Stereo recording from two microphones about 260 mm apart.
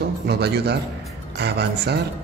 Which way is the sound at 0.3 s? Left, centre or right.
Right.